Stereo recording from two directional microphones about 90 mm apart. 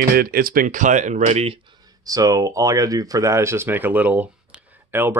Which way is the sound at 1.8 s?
40° right (ahead or behind).